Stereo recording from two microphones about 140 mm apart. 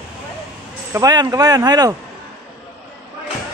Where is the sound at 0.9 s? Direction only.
25° right (ahead or behind).